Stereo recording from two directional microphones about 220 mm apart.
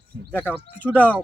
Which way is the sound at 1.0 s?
5° right (ahead or behind).